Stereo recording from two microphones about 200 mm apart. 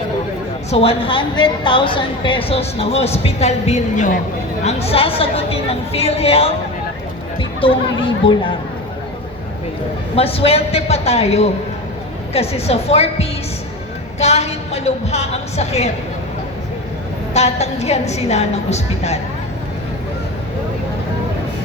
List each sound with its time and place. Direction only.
0.7 s a woman's voice: 30° left (ahead or behind)
10.2 s a woman's voice: 30° left (ahead or behind)
17.3 s a woman's voice: 35° left (ahead or behind)